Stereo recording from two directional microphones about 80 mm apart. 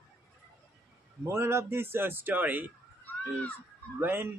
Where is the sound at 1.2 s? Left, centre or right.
Right.